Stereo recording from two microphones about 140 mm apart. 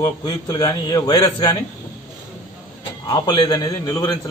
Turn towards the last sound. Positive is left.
turn(degrees=25)  # may be behind; listen again after turning